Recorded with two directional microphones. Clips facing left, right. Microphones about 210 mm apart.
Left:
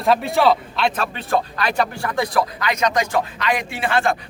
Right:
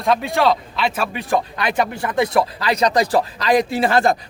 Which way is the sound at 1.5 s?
20° right (ahead or behind).